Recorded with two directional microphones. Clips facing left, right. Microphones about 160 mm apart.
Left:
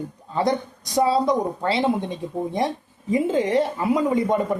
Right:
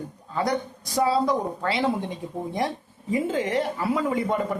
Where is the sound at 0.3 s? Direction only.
20° left (ahead or behind).